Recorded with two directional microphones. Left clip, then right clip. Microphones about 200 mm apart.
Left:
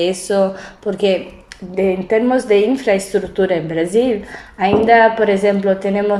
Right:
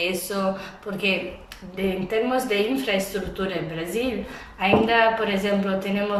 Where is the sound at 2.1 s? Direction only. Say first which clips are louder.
Left 9 dB; 35° left (ahead or behind).